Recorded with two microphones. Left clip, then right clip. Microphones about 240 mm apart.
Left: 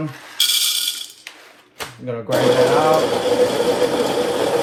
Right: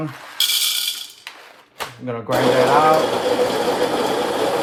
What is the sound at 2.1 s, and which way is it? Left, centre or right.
Speech, right.